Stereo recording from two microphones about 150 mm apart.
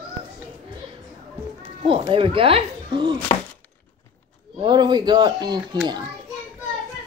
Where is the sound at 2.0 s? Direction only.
35° right (ahead or behind).